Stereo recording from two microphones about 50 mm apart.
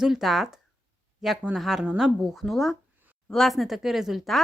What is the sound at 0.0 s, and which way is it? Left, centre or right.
Speech, centre.